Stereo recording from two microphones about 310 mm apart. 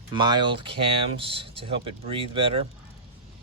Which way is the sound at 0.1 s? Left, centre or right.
Centre.